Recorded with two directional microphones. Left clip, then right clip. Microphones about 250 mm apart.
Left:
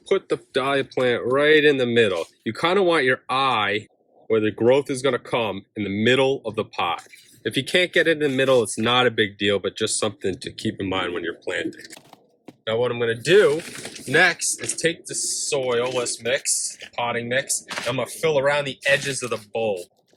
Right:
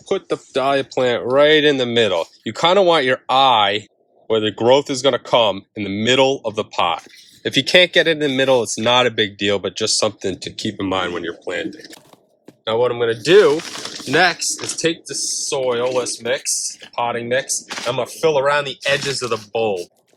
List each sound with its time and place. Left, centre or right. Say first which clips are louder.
0.1 s speech: right 1 dB; centre